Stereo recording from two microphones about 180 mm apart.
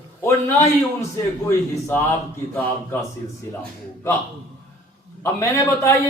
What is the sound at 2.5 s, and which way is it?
Speech, 15° left (ahead or behind).